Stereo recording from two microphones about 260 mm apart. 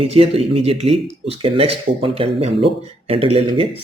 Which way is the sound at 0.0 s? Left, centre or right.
Right.